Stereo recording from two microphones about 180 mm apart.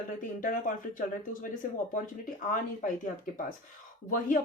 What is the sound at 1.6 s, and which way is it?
Speech, 50° left (ahead or behind).